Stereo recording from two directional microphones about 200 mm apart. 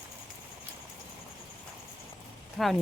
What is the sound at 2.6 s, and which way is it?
Speech, centre (ahead or behind).